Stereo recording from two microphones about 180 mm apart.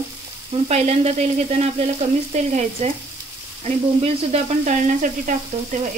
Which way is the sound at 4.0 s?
40° right (ahead or behind).